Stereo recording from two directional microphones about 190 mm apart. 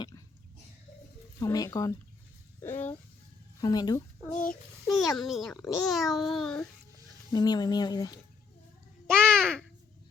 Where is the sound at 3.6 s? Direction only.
20° left (ahead or behind).